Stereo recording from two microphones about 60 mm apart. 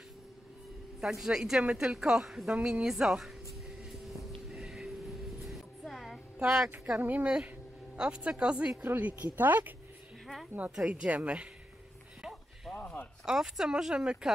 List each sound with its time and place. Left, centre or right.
1.0 s a woman's voice: centre
4.5 s a sound: centre
6.4 s a woman's voice: centre
7.0 s speech: right
7.2 s a woman's voice: centre
8.8 s speech: right
10.8 s speech: centre
12.2 s a sound: centre
12.8 s a sound: left
13.2 s a woman's voice: centre